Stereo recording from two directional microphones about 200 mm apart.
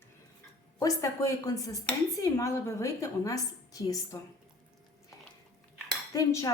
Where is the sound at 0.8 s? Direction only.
15° left (ahead or behind).